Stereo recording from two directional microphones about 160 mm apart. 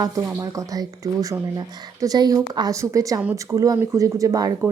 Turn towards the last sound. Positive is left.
turn(degrees=-20)  # may be behind; listen again after turning